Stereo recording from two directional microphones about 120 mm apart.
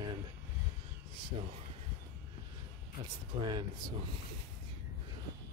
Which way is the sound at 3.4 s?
40° right (ahead or behind).